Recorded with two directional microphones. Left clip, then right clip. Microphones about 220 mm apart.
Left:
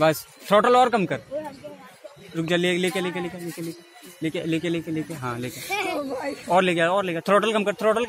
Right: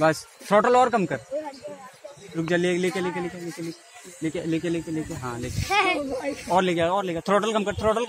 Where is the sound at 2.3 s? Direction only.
45° left (ahead or behind).